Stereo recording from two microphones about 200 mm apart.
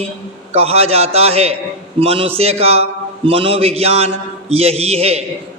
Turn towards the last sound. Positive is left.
turn(degrees=-30)  # may be behind; listen again after turning